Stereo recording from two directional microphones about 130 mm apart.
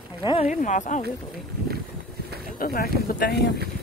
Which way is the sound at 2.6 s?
90° left.